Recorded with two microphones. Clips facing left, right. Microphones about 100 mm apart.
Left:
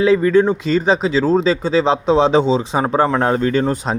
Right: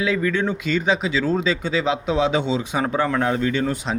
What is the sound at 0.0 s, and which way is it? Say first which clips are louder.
Speech: left 9 dB; 35° left (ahead or behind).